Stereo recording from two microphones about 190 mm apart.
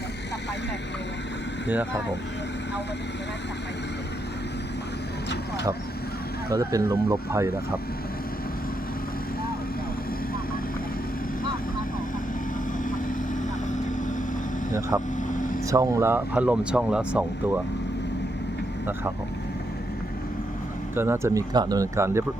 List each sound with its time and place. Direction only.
6.5 s speech: 15° right (ahead or behind)
12.9 s vehicle: 45° left (ahead or behind)
14.7 s speech: 15° right (ahead or behind)
15.3 s air conditioning: 45° left (ahead or behind)
15.7 s speech: 15° right (ahead or behind)
20.9 s speech: 10° right (ahead or behind)